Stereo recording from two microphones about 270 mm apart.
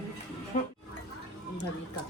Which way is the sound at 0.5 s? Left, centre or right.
Left.